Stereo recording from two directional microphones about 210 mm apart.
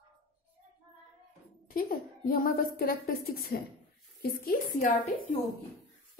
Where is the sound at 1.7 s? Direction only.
40° left (ahead or behind).